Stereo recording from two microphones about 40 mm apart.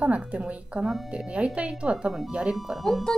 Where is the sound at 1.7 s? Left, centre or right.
Centre.